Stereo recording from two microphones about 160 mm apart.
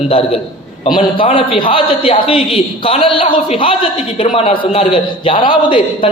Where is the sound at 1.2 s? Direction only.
35° left (ahead or behind).